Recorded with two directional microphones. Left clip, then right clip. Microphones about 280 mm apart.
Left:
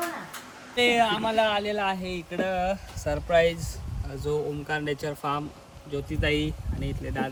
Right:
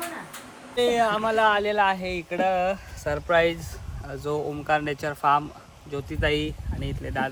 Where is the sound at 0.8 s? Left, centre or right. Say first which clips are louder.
Even; centre.